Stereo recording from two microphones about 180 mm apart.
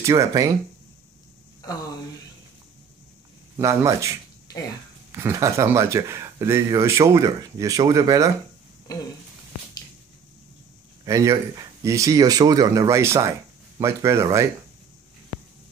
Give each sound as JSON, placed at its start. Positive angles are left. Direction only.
{"t": 0.0, "sound": "speech", "side_deg": -20}
{"t": 3.5, "sound": "speech", "side_deg": -15}
{"t": 11.1, "sound": "speech", "side_deg": -20}